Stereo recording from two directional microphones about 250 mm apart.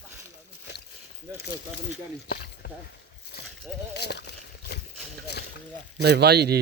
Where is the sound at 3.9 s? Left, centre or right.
Left.